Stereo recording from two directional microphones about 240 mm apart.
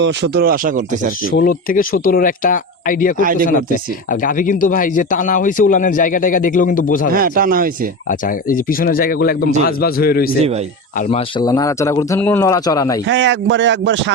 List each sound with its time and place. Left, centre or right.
0.0 s speech: right
1.4 s speech: left
3.2 s speech: right
4.1 s speech: left
7.1 s speech: right
8.3 s speech: left
11.3 s speech: centre
13.1 s speech: right